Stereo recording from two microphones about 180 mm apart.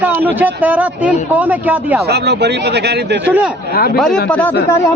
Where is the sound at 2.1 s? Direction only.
65° right (ahead or behind).